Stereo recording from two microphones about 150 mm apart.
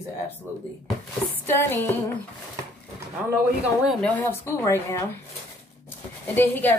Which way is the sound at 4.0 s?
15° left (ahead or behind).